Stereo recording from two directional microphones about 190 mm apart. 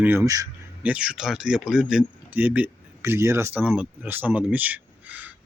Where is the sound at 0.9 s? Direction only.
5° right (ahead or behind).